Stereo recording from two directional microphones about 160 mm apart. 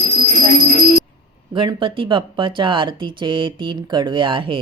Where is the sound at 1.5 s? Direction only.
30° right (ahead or behind).